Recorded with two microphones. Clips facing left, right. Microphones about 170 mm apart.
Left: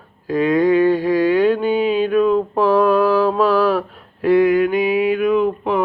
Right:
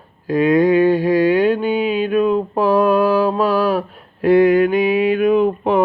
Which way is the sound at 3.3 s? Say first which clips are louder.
Left 1 dB; 10° right (ahead or behind).